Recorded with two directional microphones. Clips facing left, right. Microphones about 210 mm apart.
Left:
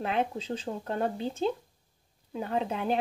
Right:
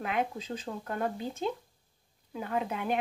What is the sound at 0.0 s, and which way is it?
Speech, 30° left (ahead or behind).